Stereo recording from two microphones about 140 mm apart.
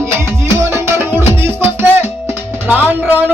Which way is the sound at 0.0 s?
20° right (ahead or behind).